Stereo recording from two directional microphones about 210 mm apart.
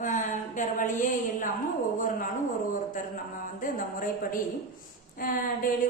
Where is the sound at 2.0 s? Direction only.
40° left (ahead or behind).